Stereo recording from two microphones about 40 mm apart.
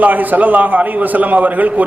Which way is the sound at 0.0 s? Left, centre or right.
Right.